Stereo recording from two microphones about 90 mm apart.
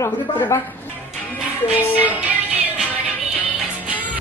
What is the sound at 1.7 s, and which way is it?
Music, 15° right (ahead or behind).